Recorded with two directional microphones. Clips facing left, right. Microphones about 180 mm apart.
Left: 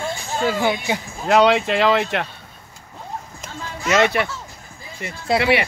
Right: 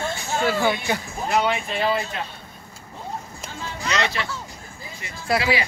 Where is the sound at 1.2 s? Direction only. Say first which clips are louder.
Left 8 dB; 85° left.